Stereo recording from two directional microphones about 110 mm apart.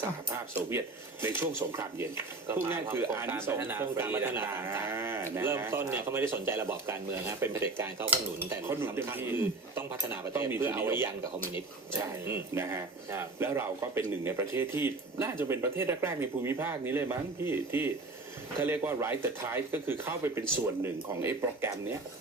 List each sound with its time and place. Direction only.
1.2 s speech: 20° right (ahead or behind)
12.2 s speech: 20° right (ahead or behind)